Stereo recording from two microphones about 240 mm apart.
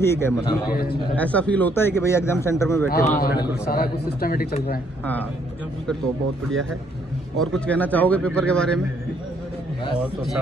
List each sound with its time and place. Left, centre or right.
0.0 s a man's voice: centre
0.7 s a man's voice: left
1.1 s a man's voice: centre
2.9 s a man's voice: left
7.3 s a man's voice: centre